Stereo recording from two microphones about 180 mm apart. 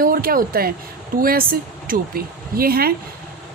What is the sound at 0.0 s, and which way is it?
Speech, 55° right (ahead or behind).